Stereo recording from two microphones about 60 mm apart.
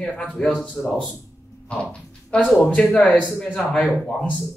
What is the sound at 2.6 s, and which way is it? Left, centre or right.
Speech, centre.